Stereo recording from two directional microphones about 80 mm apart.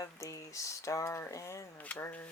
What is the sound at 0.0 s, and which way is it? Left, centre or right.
Speech, left.